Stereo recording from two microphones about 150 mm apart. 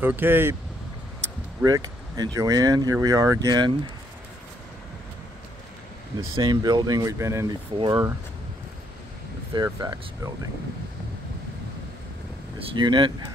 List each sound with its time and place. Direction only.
0.0 s speech: 15° right (ahead or behind)
1.6 s speech: 25° right (ahead or behind)
6.3 s speech: 30° right (ahead or behind)
7.8 s speech: 30° right (ahead or behind)
9.5 s speech: 30° right (ahead or behind)
12.5 s speech: 30° right (ahead or behind)